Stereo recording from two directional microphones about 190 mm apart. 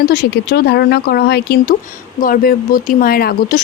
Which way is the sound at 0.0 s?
55° left (ahead or behind).